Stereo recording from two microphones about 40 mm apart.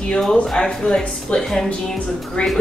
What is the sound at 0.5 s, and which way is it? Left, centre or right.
A woman's voice, centre.